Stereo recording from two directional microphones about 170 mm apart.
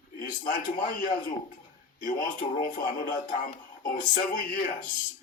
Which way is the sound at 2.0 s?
50° left (ahead or behind).